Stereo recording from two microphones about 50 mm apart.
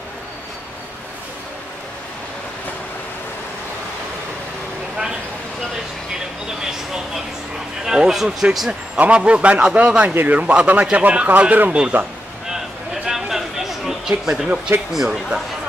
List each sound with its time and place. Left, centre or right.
6.6 s vehicle: centre
7.8 s a man's voice: centre
8.4 s speech: right
12.4 s a sound: centre
14.7 s speech: right
15.0 s speech: centre